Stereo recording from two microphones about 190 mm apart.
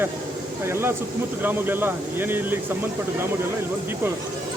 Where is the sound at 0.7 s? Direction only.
15° right (ahead or behind).